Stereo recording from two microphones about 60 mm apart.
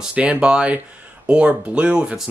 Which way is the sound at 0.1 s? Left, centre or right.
Centre.